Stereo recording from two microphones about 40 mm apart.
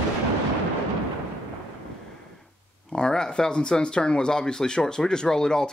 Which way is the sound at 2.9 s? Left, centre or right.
Centre.